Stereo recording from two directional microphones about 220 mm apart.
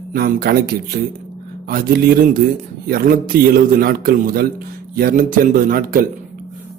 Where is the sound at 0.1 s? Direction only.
45° right (ahead or behind).